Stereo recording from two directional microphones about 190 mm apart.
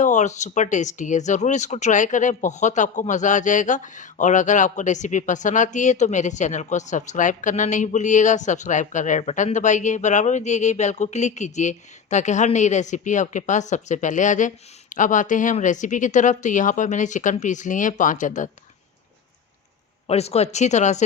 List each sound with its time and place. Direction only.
0.0 s speech: 40° left (ahead or behind)
20.1 s speech: 35° left (ahead or behind)